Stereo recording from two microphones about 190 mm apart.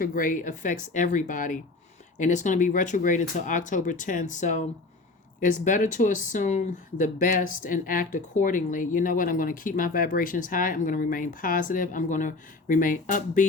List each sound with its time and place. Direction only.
0.0 s speech: 45° left (ahead or behind)